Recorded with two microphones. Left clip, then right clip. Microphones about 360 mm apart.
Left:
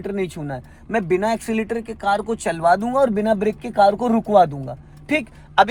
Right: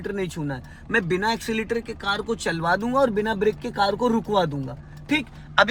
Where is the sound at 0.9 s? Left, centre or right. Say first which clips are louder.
Left 3 dB; centre.